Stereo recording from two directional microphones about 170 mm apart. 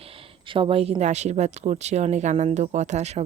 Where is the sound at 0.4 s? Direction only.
30° right (ahead or behind).